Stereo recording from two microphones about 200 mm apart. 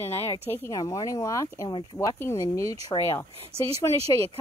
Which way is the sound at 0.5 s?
10° left (ahead or behind).